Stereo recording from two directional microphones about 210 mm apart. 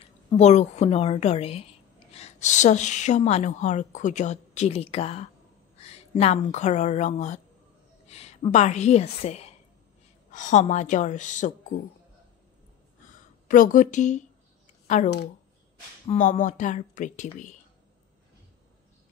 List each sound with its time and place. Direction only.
0.0 s a woman's voice: 30° left (ahead or behind)
13.5 s a woman's voice: 40° left (ahead or behind)
16.1 s a woman's voice: 35° left (ahead or behind)